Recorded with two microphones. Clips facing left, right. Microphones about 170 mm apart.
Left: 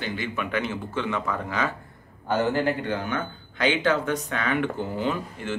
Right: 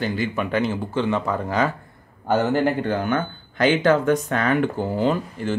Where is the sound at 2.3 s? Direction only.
50° right (ahead or behind).